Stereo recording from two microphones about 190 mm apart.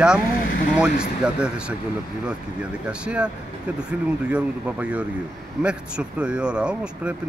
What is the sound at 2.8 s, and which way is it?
Speech, 5° right (ahead or behind).